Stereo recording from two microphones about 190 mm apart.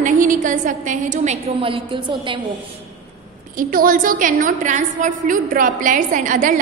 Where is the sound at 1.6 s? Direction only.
25° right (ahead or behind).